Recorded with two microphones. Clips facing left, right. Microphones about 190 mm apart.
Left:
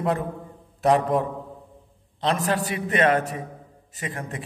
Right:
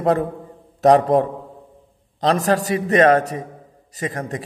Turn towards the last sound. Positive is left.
turn(degrees=-40)  # may be behind; listen again after turning